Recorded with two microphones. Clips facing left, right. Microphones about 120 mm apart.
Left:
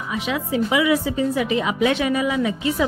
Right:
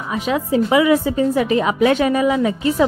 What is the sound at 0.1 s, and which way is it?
A woman's voice, 40° right (ahead or behind).